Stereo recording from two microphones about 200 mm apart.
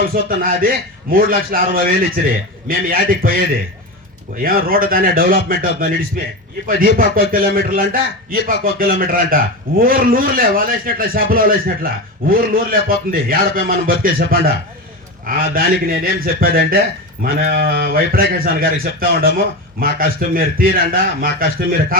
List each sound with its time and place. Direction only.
0.0 s a man's voice: 45° right (ahead or behind)